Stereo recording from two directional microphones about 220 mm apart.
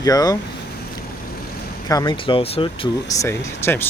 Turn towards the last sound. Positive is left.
turn(degrees=10)  # may be behind; listen again after turning